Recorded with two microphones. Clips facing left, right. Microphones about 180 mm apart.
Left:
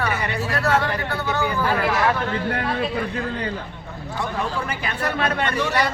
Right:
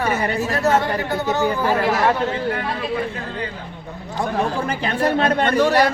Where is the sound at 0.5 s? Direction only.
20° right (ahead or behind).